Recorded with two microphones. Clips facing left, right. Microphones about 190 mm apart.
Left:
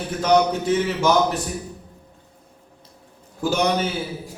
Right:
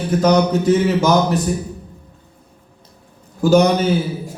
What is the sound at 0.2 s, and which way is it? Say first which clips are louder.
Speech: right 2 dB; 40° right (ahead or behind).